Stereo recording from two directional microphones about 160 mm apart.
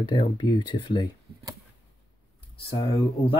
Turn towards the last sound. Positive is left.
turn(degrees=30)  # may be behind; listen again after turning